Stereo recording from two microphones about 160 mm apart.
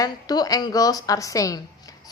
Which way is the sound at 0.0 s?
25° left (ahead or behind).